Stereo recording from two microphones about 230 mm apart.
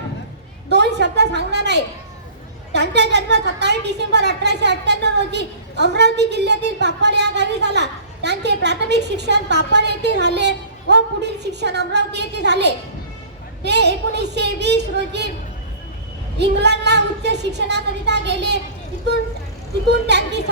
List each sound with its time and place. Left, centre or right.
0.7 s a sound: right
2.7 s a woman's voice: right
16.4 s a woman's voice: right
20.1 s a woman's voice: right